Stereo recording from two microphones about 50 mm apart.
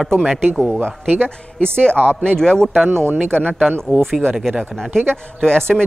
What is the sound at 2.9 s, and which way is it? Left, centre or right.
Speech, right.